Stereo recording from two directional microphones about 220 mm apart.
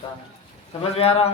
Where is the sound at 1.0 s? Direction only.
30° left (ahead or behind).